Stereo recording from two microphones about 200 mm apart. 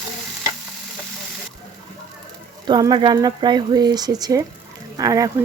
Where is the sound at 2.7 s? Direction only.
20° right (ahead or behind).